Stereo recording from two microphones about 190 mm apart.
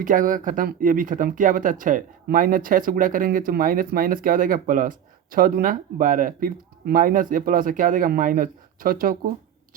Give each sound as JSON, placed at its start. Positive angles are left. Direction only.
{"t": 0.0, "sound": "speech", "side_deg": -45}